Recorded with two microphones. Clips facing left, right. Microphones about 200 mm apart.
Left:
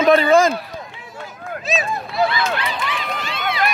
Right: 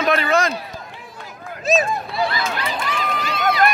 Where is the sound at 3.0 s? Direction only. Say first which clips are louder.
Right 3 dB; 40° right (ahead or behind).